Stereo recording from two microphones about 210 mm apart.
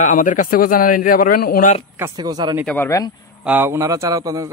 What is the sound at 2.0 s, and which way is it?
Speech, 20° right (ahead or behind).